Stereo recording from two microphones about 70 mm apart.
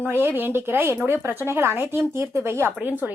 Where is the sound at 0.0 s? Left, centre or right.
Right.